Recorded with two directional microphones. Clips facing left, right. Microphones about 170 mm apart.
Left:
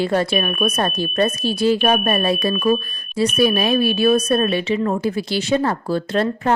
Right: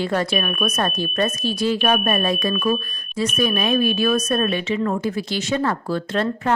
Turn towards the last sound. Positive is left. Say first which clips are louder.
# left 3 dB
turn(degrees=35)  # may be behind; listen again after turning